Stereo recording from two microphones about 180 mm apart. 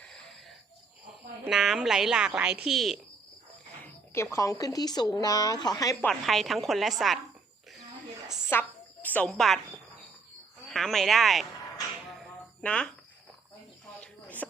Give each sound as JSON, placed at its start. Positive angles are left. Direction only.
{"t": 1.5, "sound": "a woman's voice", "side_deg": 0}
{"t": 4.1, "sound": "a woman's voice", "side_deg": 15}
{"t": 6.1, "sound": "a woman's voice", "side_deg": 0}
{"t": 8.4, "sound": "a sound", "side_deg": 10}
{"t": 10.7, "sound": "a woman's voice", "side_deg": 0}
{"t": 12.2, "sound": "music", "side_deg": 5}
{"t": 14.0, "sound": "a sound", "side_deg": 10}